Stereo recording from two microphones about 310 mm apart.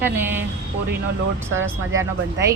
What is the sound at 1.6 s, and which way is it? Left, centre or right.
Speech, right.